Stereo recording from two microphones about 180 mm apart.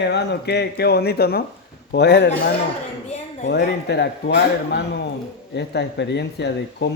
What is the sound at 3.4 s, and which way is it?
Speech, 70° left (ahead or behind).